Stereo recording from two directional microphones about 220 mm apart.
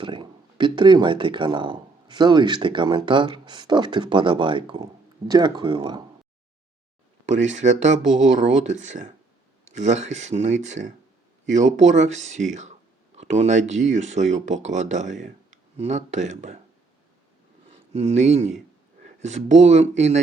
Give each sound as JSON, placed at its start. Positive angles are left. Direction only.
{"t": 0.0, "sound": "speech", "side_deg": -20}
{"t": 7.3, "sound": "speech", "side_deg": -30}
{"t": 17.9, "sound": "speech", "side_deg": -30}